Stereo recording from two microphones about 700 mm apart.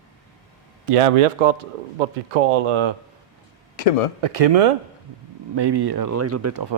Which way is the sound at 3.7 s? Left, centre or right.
Left.